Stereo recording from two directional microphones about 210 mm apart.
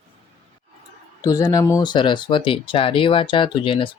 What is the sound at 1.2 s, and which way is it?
Speech, 15° left (ahead or behind).